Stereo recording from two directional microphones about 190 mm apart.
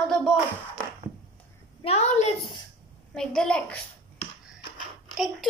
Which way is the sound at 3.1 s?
5° left (ahead or behind).